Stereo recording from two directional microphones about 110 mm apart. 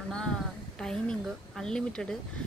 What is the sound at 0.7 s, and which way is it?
Speech, 5° left (ahead or behind).